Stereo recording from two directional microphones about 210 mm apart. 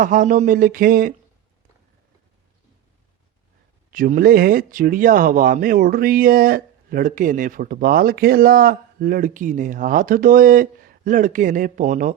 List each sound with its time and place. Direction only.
0.0 s speech: 40° right (ahead or behind)
3.9 s speech: 45° right (ahead or behind)